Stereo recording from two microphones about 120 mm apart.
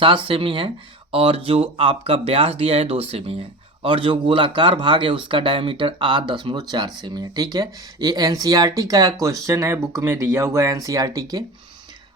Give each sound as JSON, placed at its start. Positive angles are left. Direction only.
{"t": 0.0, "sound": "speech", "side_deg": -45}